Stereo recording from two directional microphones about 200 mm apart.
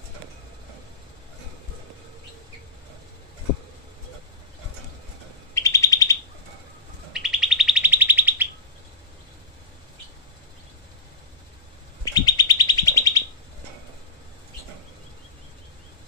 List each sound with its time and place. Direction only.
5.5 s bird: 15° left (ahead or behind)
7.1 s bird: centre (ahead or behind)
12.0 s bird: 20° left (ahead or behind)